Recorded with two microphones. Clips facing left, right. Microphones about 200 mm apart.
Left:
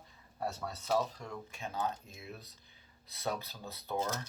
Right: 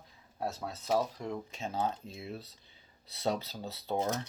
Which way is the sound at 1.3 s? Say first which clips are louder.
Right 4 dB; 25° right (ahead or behind).